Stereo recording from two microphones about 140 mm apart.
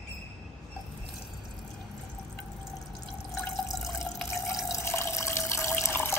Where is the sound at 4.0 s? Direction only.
20° left (ahead or behind).